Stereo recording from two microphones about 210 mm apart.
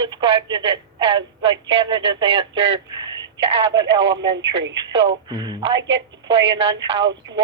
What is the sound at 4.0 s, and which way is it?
Speech, 60° right (ahead or behind).